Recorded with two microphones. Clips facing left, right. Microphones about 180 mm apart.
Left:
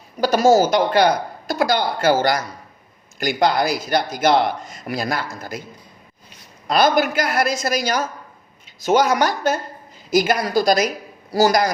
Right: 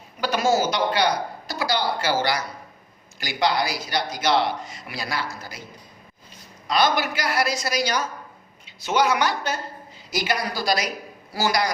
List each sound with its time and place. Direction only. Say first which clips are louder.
0.2 s a man's voice: left 7 dB; 40° left (ahead or behind)
6.7 s a man's voice: left 5 dB; 50° left (ahead or behind)